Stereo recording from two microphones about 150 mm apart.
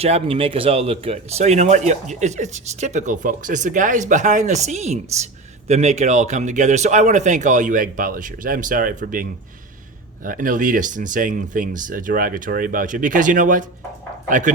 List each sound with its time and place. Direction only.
0.0 s speech: 40° right (ahead or behind); by 9.2 s 65° right (ahead or behind)
10.2 s speech: 65° right (ahead or behind)